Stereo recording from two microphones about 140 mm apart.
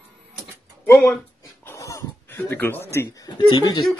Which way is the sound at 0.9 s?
15° left (ahead or behind).